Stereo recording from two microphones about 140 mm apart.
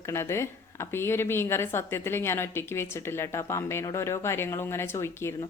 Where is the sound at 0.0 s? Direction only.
20° left (ahead or behind).